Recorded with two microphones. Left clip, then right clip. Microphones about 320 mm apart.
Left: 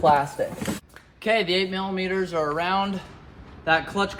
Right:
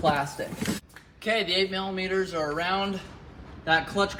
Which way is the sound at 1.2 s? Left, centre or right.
Left.